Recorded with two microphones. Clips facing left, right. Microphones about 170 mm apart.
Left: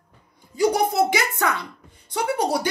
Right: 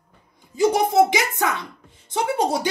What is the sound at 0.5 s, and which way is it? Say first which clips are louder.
Speech: right 3 dB; 25° right (ahead or behind).